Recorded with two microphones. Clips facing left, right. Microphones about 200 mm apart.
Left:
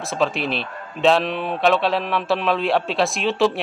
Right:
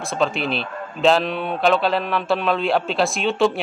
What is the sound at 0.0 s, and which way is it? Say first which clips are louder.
A man's voice: even; centre (ahead or behind).